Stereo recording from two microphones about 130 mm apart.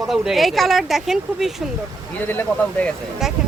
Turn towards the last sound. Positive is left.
turn(degrees=-5)  # may be behind; listen again after turning